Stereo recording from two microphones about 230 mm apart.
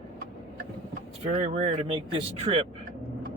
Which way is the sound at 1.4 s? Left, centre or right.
Right.